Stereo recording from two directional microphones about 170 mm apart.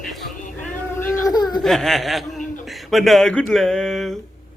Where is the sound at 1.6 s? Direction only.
Centre (ahead or behind).